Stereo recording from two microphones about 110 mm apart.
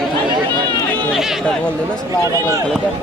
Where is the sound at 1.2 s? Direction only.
5° right (ahead or behind).